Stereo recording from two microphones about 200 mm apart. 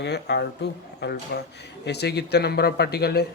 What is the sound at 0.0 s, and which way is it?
A man's voice, 55° left (ahead or behind).